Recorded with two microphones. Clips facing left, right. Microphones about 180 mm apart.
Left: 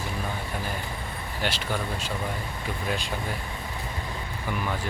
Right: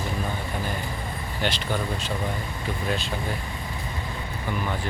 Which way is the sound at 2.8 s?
10° left (ahead or behind).